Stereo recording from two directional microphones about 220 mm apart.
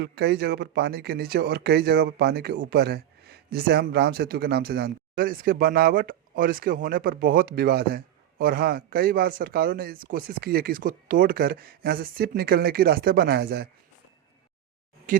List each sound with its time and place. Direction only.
0.0 s speech: 45° right (ahead or behind)
15.1 s speech: 35° right (ahead or behind)